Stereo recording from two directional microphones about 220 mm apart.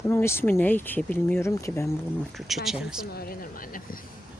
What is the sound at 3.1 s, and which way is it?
Speech, 45° left (ahead or behind).